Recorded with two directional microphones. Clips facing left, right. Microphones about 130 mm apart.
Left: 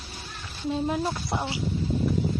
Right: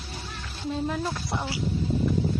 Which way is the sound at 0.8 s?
20° left (ahead or behind).